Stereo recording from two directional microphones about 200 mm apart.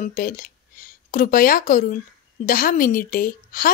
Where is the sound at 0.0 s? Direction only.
40° left (ahead or behind).